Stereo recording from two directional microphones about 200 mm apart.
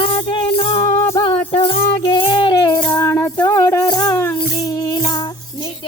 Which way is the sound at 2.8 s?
10° left (ahead or behind).